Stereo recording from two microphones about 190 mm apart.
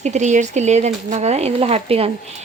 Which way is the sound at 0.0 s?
40° right (ahead or behind).